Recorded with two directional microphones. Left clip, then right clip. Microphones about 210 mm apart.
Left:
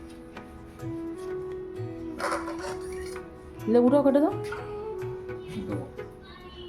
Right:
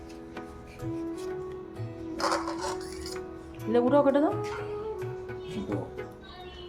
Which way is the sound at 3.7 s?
35° left (ahead or behind).